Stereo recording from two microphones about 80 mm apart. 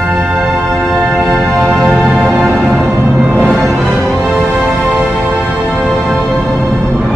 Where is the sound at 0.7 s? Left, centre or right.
Centre.